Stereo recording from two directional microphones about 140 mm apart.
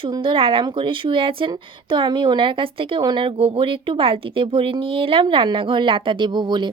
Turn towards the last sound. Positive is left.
turn(degrees=-30)  # may be behind; listen again after turning